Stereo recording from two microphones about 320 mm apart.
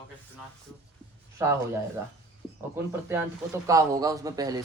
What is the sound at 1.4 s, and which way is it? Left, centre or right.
Speech, centre.